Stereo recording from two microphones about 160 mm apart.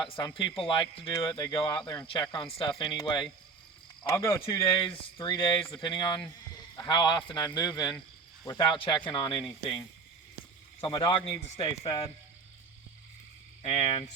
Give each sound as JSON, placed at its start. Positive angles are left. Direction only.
{"t": 0.5, "sound": "speech", "side_deg": 30}
{"t": 4.6, "sound": "speech", "side_deg": 30}
{"t": 10.8, "sound": "speech", "side_deg": 30}
{"t": 13.6, "sound": "speech", "side_deg": 40}